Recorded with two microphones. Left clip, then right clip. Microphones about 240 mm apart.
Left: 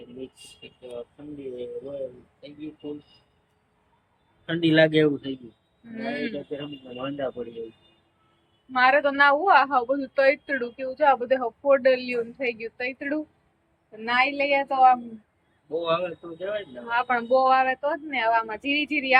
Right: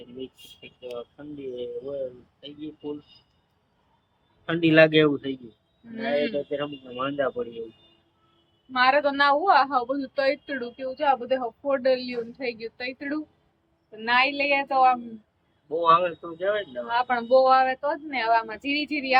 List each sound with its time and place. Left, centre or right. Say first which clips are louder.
4.4 s a man's voice: right 2 dB; centre
6.1 s a sound: right 8 dB; centre
6.9 s a man's voice: right 4 dB; centre
8.7 s speech: left 1 dB; centre
15.8 s speech: right 7 dB; centre
16.9 s speech: right 1 dB; centre